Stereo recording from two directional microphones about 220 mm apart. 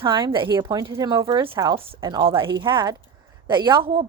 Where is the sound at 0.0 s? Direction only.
20° right (ahead or behind).